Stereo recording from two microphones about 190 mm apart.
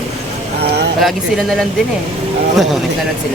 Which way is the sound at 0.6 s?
60° right (ahead or behind).